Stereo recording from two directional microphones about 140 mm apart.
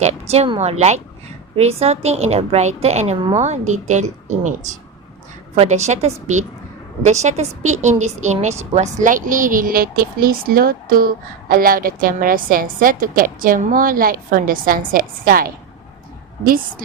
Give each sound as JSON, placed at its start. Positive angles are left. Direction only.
{"t": 0.0, "sound": "a woman's voice", "side_deg": -50}
{"t": 5.5, "sound": "a woman's voice", "side_deg": -55}